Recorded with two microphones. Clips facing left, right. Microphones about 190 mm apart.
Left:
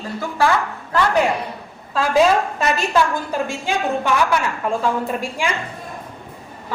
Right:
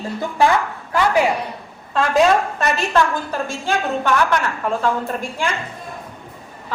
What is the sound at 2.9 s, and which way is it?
A woman's voice, 15° left (ahead or behind).